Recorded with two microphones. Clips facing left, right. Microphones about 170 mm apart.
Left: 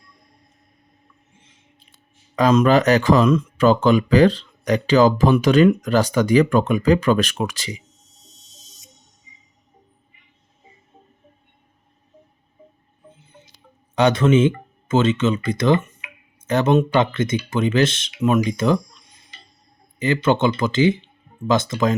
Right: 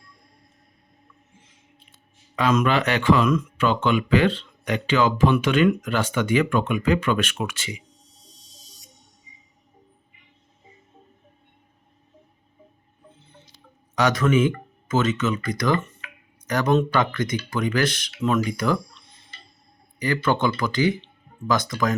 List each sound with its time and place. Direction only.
1.9 s speech: 40° left (ahead or behind)
3.2 s speech: 30° left (ahead or behind)
8.0 s music: 20° left (ahead or behind)
13.9 s speech: 30° left (ahead or behind)